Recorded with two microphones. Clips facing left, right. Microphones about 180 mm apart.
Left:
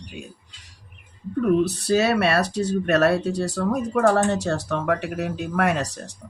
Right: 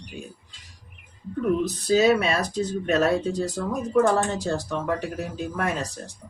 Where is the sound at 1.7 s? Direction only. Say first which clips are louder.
Right 1 dB; 70° left (ahead or behind).